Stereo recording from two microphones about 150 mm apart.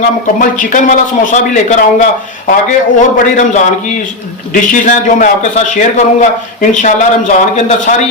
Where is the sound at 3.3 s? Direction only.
55° left (ahead or behind).